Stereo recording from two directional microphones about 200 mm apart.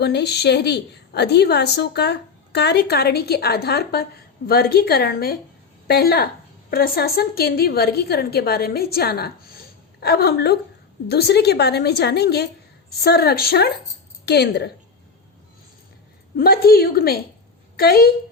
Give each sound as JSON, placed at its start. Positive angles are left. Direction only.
{"t": 0.0, "sound": "a woman's voice", "side_deg": 55}
{"t": 16.4, "sound": "a woman's voice", "side_deg": 50}